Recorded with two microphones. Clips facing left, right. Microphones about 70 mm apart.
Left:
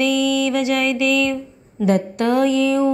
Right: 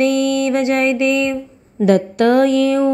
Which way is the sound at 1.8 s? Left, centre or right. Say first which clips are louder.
Right 5 dB; right.